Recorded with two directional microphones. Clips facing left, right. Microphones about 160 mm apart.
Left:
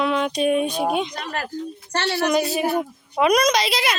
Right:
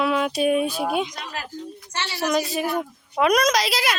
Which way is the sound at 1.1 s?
60° left (ahead or behind).